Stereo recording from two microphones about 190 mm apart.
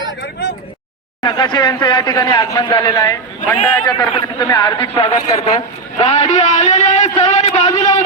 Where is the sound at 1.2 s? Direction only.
25° left (ahead or behind).